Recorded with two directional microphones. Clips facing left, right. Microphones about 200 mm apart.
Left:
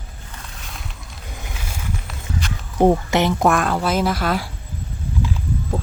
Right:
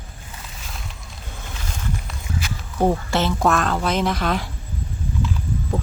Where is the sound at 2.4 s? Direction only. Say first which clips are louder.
Left 2 dB; 5° right (ahead or behind).